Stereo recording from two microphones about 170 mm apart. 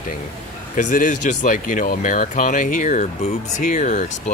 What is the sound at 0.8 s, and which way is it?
Speech, 50° left (ahead or behind).